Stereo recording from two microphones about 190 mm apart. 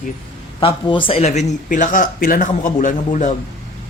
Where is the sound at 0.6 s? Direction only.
25° left (ahead or behind).